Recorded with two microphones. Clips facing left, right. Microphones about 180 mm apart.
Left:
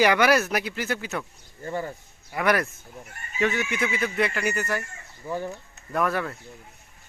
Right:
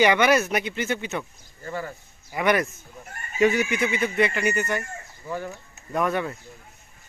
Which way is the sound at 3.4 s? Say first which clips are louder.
Right 5 dB; 20° right (ahead or behind).